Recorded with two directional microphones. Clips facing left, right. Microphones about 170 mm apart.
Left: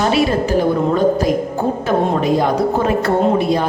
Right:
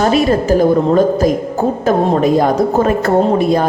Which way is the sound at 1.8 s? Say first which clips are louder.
Right 4 dB; 45° right (ahead or behind).